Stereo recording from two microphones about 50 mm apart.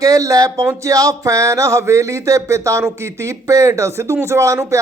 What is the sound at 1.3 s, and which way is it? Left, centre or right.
Speech, right.